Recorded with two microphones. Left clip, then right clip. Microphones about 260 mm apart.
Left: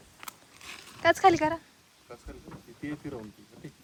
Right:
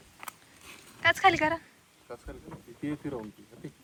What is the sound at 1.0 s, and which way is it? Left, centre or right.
Speech, centre.